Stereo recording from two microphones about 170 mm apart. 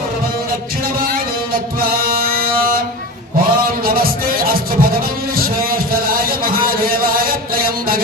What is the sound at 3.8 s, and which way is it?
Music, 60° right (ahead or behind).